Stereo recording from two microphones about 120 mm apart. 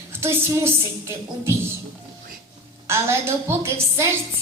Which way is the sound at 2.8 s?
20° right (ahead or behind).